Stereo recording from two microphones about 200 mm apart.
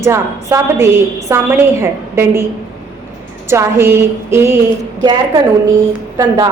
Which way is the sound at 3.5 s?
10° right (ahead or behind).